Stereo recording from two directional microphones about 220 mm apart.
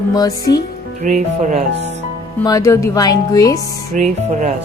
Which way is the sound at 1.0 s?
35° right (ahead or behind).